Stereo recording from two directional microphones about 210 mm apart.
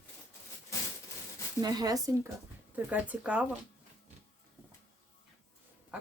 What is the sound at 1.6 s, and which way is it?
Speech, 20° right (ahead or behind).